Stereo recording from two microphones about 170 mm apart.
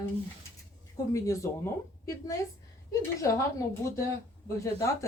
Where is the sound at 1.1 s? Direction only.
20° left (ahead or behind).